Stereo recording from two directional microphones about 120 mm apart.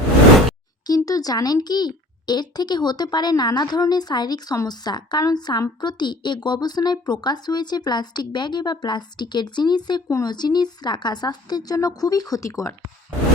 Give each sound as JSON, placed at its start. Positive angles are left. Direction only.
{"t": 0.9, "sound": "speech", "side_deg": 30}